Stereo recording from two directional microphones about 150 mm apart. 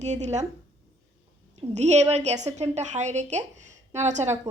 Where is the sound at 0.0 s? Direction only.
50° right (ahead or behind).